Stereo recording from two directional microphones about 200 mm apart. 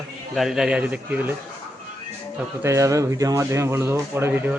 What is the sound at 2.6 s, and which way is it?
Speech, 15° right (ahead or behind).